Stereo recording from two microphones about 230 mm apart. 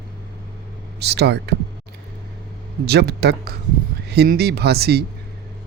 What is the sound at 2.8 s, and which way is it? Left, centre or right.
Speech, right.